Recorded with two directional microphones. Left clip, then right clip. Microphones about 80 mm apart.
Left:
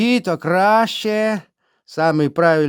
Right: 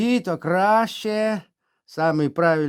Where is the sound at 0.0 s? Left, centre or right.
Left.